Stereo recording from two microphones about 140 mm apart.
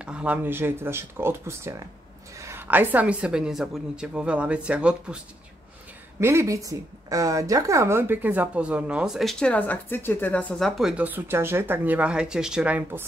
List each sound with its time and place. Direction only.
0.0 s a woman's voice: 10° right (ahead or behind)
6.1 s a woman's voice: 20° right (ahead or behind); by 10.4 s 15° left (ahead or behind)
10.6 s a woman's voice: 5° right (ahead or behind)